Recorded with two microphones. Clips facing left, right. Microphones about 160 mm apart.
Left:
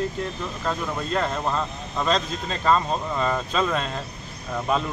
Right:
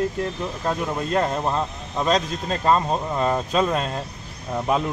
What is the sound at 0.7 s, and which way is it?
Speech, 15° right (ahead or behind).